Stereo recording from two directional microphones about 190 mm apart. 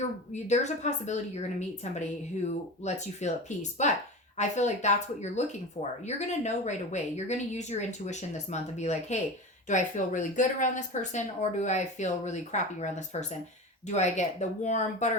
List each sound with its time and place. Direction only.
0.4 s speech: 40° left (ahead or behind)